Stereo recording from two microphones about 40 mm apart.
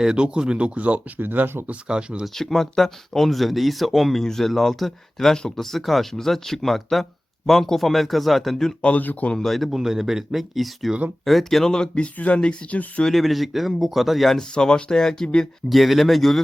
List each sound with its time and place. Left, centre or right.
0.0 s speech: right
1.2 s speech: right
1.9 s speech: right
2.3 s speech: centre
4.2 s speech: centre
9.0 s speech: left
9.4 s speech: centre
9.7 s speech: centre
11.6 s speech: centre
11.9 s speech: left
13.1 s speech: centre
14.5 s speech: left
15.7 s speech: centre